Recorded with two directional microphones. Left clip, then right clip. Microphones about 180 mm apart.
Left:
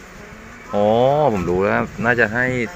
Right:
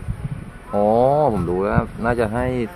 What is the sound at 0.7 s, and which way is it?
Speech, 15° left (ahead or behind).